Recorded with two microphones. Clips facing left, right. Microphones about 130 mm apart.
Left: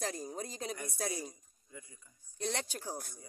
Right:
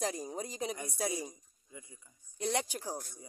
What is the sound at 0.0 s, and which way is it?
Speech, 15° right (ahead or behind).